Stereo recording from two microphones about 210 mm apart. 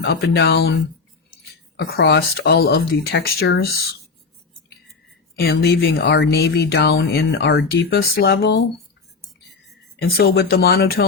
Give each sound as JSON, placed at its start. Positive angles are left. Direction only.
{"t": 0.0, "sound": "speech", "side_deg": 50}
{"t": 5.4, "sound": "speech", "side_deg": 50}
{"t": 10.0, "sound": "speech", "side_deg": 50}